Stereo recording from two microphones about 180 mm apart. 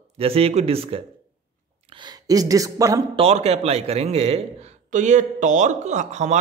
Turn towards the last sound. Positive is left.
turn(degrees=-40)  # may be behind; listen again after turning